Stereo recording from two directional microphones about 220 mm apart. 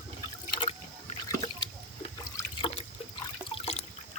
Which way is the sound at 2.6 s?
25° left (ahead or behind).